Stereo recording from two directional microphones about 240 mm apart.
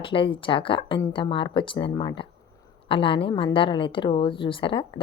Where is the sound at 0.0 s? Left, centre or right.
Left.